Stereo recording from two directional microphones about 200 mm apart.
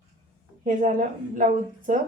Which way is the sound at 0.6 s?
40° right (ahead or behind).